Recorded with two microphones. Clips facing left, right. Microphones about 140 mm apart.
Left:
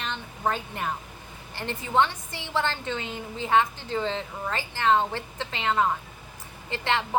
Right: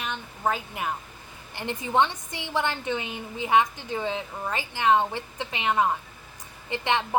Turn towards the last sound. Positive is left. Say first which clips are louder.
# right 1 dB
turn(degrees=-15)  # may be behind; listen again after turning